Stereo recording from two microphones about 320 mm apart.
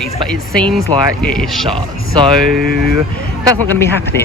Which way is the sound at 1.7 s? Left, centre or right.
Centre.